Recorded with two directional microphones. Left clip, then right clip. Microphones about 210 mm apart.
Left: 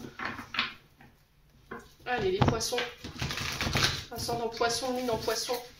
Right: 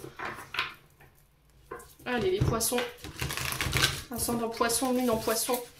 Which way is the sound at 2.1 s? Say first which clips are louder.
Even; 50° right (ahead or behind).